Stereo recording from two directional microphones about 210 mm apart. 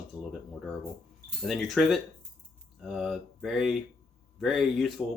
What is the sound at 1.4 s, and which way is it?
Speech, centre (ahead or behind).